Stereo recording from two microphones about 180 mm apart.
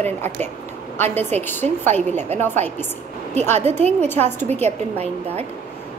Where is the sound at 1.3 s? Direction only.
10° left (ahead or behind).